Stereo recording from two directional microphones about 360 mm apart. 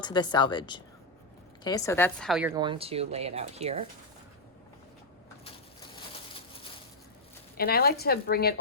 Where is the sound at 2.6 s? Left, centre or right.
Centre.